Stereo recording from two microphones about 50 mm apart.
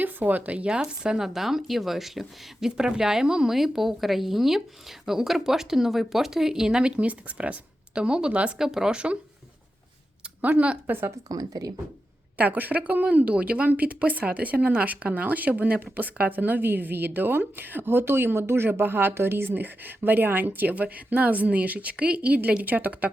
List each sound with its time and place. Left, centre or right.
0.0 s speech: right
0.7 s speech: centre
8.5 s speech: centre
10.9 s speech: right
12.4 s speech: right